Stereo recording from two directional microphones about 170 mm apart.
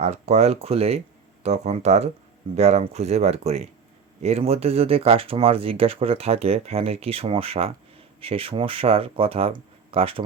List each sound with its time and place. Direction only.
0.0 s speech: 40° right (ahead or behind)